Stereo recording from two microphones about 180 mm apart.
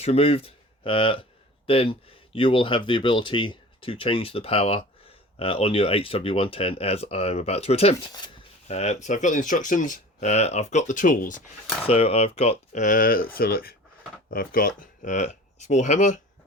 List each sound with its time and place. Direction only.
0.0 s speech: 35° left (ahead or behind)
11.9 s speech: 35° left (ahead or behind)